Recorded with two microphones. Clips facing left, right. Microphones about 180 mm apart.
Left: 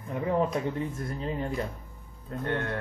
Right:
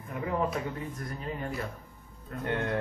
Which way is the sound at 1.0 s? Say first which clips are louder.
Left 4 dB; 25° left (ahead or behind).